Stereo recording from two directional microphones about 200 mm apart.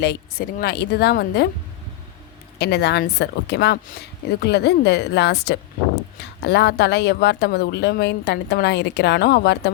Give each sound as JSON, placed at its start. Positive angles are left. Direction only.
{"t": 0.0, "sound": "a woman's voice", "side_deg": 55}
{"t": 2.6, "sound": "speech", "side_deg": 55}